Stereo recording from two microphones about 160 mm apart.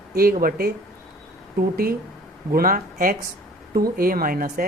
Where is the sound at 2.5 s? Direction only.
65° right (ahead or behind).